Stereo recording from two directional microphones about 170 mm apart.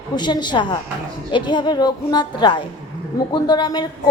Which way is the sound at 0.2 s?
25° left (ahead or behind).